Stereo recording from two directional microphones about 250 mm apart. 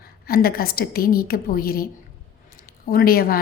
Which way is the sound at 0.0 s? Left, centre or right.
Left.